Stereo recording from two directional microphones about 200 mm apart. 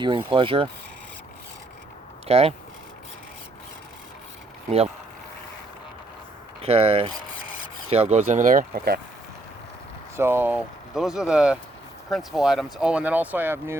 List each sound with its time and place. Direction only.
0.0 s speech: 25° right (ahead or behind)
2.2 s speech: 30° right (ahead or behind)
6.6 s speech: 30° right (ahead or behind); by 9.0 s 50° right (ahead or behind)
10.2 s speech: 10° right (ahead or behind)